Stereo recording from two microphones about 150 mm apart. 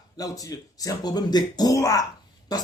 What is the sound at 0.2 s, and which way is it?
Speech, 25° left (ahead or behind).